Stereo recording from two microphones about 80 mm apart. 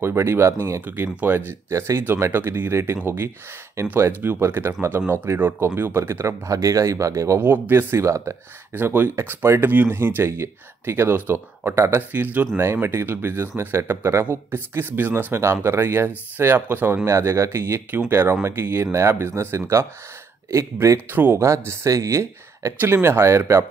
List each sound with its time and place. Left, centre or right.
0.0 s speech: right
7.3 s speech: right
8.7 s speech: right
21.1 s speech: right
21.5 s speech: right